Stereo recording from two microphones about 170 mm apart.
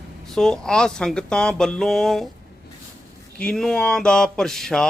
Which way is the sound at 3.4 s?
5° left (ahead or behind).